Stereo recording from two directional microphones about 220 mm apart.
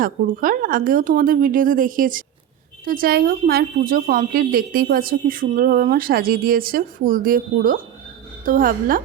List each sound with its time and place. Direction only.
0.0 s a woman's voice: 40° right (ahead or behind)